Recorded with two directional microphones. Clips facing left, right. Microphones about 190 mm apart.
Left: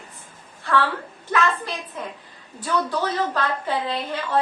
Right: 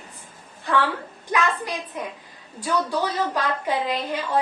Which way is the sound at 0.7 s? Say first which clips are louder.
Left 1 dB; 20° right (ahead or behind).